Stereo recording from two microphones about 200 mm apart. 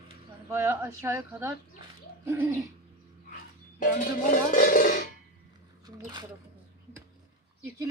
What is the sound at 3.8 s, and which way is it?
Music, 45° left (ahead or behind).